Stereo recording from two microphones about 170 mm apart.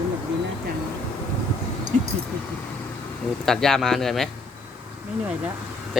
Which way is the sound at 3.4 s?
Centre (ahead or behind).